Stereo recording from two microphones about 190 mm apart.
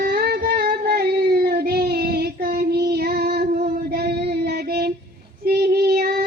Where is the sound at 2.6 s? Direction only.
60° right (ahead or behind).